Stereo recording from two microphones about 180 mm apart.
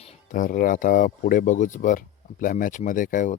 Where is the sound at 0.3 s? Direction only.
50° left (ahead or behind).